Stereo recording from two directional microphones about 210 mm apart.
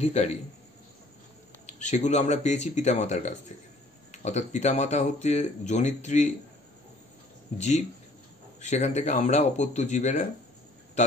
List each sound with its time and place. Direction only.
0.0 s speech: 30° left (ahead or behind)
1.7 s speech: 35° left (ahead or behind)
7.5 s speech: 35° left (ahead or behind)